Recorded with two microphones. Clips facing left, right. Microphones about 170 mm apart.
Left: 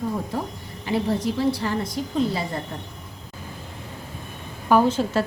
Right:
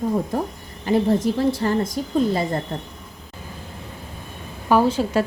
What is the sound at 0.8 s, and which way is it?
A woman's voice, 45° right (ahead or behind).